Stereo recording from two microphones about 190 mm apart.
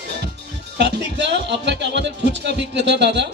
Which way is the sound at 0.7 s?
65° right (ahead or behind).